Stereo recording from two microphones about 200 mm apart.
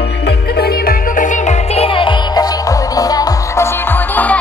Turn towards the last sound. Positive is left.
turn(degrees=10)  # may be behind; listen again after turning